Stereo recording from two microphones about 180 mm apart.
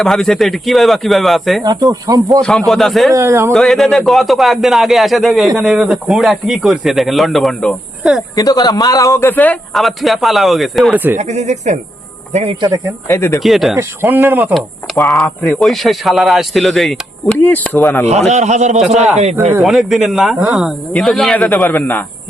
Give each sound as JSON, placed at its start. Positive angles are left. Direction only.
{"t": 0.0, "sound": "speech", "side_deg": 0}
{"t": 1.6, "sound": "speech", "side_deg": -20}
{"t": 2.4, "sound": "speech", "side_deg": 5}
{"t": 3.1, "sound": "speech", "side_deg": -15}
{"t": 3.5, "sound": "speech", "side_deg": 0}
{"t": 8.4, "sound": "a man's voice", "side_deg": 20}
{"t": 11.2, "sound": "speech", "side_deg": -40}
{"t": 13.1, "sound": "a man's voice", "side_deg": 15}
{"t": 13.4, "sound": "speech", "side_deg": 0}
{"t": 13.7, "sound": "speech", "side_deg": -10}
{"t": 14.5, "sound": "speech", "side_deg": 0}
{"t": 18.3, "sound": "speech", "side_deg": -40}
{"t": 19.5, "sound": "speech", "side_deg": 0}